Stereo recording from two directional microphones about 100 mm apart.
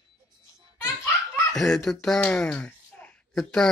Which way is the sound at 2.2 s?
10° left (ahead or behind).